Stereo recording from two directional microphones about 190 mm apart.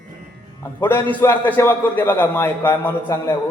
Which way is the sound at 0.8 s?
10° left (ahead or behind).